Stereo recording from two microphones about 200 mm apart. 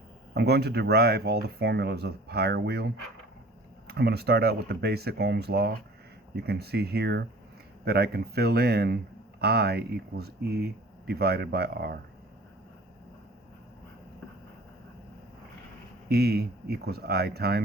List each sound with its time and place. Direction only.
0.3 s speech: 55° right (ahead or behind)
16.0 s speech: 55° right (ahead or behind)